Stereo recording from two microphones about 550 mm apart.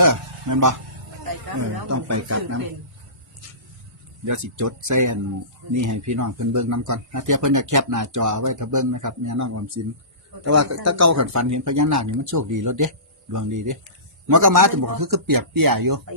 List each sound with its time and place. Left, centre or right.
0.0 s a sound: right
1.2 s hubbub: right
1.9 s speech: right
4.3 s speech: right